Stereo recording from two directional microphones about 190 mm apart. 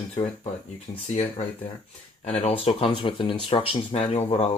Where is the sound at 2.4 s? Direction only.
30° left (ahead or behind).